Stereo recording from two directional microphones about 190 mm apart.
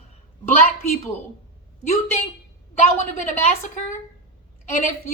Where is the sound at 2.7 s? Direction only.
35° left (ahead or behind).